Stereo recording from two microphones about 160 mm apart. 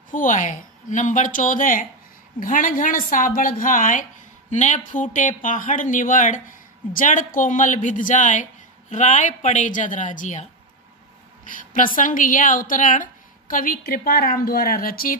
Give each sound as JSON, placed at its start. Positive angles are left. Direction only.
{"t": 0.1, "sound": "a woman's voice", "side_deg": 55}